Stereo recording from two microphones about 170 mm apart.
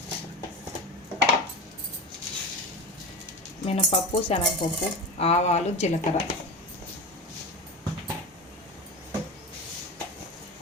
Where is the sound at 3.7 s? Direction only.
35° left (ahead or behind).